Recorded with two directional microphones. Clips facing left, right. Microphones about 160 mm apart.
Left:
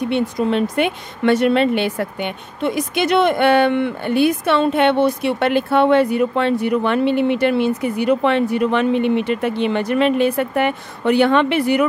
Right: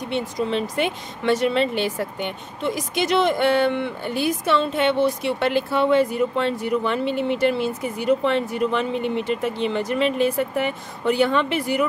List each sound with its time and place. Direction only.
0.1 s speech: 60° left (ahead or behind)